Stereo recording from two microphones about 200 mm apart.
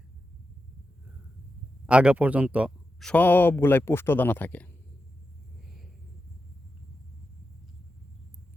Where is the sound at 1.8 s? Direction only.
5° right (ahead or behind).